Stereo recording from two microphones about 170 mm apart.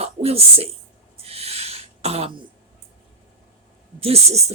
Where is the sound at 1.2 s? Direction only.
35° right (ahead or behind).